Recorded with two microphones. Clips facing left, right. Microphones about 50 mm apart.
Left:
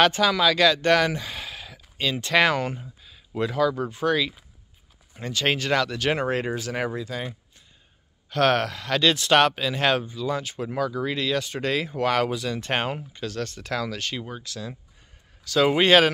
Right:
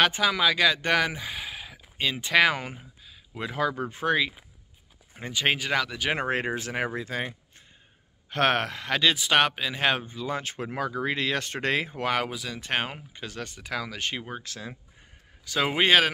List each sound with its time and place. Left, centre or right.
0.1 s speech: centre
3.5 s speech: right; by 6.1 s centre
6.1 s speech: right
7.0 s speech: right
9.0 s speech: centre
10.0 s speech: right
11.8 s speech: centre
13.1 s speech: centre
14.0 s speech: right
15.4 s speech: centre